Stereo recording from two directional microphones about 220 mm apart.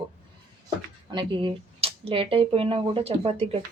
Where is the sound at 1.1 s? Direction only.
20° right (ahead or behind).